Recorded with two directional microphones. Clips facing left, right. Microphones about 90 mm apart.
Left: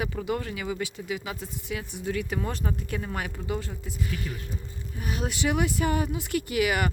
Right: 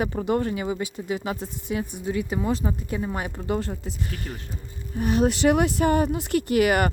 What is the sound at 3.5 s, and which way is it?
Speech, 45° right (ahead or behind).